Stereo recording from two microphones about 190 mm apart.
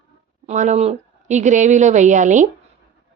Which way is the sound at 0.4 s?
40° right (ahead or behind).